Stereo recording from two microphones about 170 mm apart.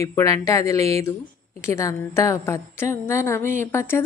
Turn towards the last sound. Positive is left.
turn(degrees=15)  # may be behind; listen again after turning